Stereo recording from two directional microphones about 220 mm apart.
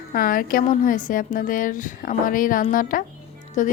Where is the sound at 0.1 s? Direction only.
40° left (ahead or behind).